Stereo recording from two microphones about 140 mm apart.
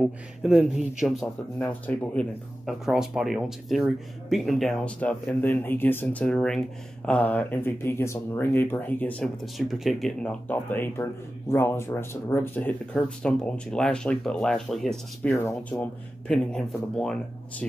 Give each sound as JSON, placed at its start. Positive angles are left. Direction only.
{"t": 0.0, "sound": "speech", "side_deg": -5}
{"t": 1.2, "sound": "speech", "side_deg": 10}
{"t": 2.6, "sound": "speech", "side_deg": -5}
{"t": 15.3, "sound": "speech", "side_deg": 20}
{"t": 16.3, "sound": "speech", "side_deg": 5}